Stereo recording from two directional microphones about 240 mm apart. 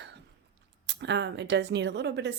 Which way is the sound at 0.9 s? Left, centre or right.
Right.